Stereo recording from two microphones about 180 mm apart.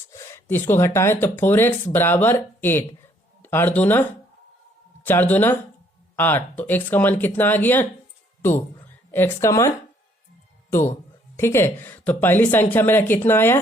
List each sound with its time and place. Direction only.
0.1 s speech: 15° left (ahead or behind)
5.0 s speech: 10° left (ahead or behind)